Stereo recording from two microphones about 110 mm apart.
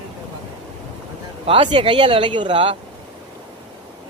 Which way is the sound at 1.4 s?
50° right (ahead or behind).